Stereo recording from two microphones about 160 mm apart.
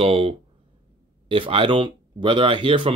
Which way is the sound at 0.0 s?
35° right (ahead or behind).